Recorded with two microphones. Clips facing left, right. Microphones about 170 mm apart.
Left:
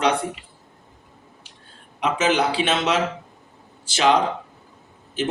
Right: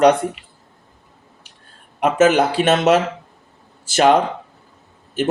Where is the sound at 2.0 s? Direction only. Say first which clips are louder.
Right 6 dB; 50° right (ahead or behind).